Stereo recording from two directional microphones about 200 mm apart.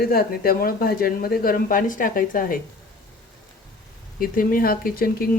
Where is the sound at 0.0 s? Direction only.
50° left (ahead or behind).